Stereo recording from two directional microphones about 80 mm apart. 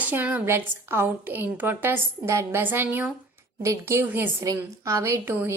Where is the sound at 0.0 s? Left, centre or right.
Right.